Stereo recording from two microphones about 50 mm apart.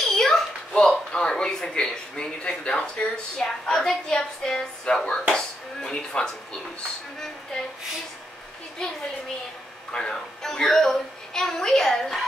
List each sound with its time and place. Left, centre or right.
0.0 s a sound: centre
0.7 s a man's voice: centre
9.9 s a woman's voice: centre